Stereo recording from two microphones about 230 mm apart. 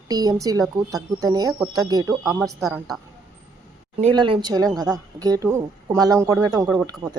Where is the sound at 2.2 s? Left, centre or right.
Centre.